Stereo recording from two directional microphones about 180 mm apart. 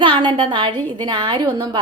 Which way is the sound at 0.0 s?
25° right (ahead or behind).